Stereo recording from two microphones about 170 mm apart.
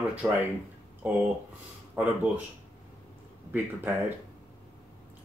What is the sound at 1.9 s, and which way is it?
Speech, 10° right (ahead or behind).